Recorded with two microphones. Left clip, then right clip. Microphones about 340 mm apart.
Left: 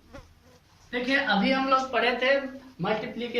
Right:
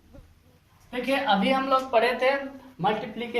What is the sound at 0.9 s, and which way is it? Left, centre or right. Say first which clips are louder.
A woman's voice: right 1 dB; centre.